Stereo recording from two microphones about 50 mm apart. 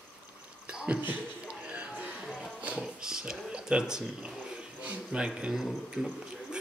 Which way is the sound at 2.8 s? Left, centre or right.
Centre.